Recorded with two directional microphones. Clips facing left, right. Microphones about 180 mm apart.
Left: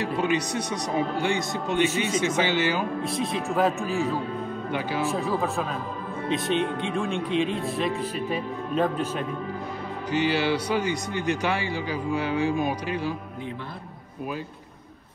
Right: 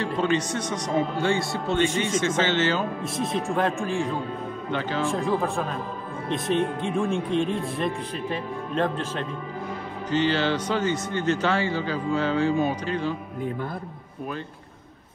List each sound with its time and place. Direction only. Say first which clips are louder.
0.0 s a man's voice: right 1 dB; 10° left (ahead or behind)
3.0 s a man's voice: even; centre (ahead or behind)